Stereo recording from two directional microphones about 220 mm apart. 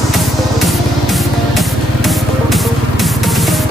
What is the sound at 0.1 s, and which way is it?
Music, centre (ahead or behind).